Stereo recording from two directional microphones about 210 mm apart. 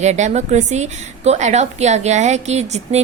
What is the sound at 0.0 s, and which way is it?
A woman's voice, 35° right (ahead or behind).